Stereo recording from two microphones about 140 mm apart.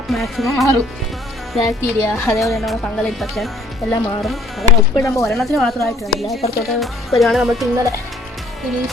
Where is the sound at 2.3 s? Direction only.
Centre (ahead or behind).